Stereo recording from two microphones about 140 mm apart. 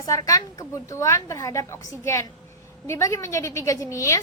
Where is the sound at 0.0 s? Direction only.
25° left (ahead or behind).